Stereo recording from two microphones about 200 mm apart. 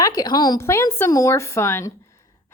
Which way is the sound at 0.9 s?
15° left (ahead or behind).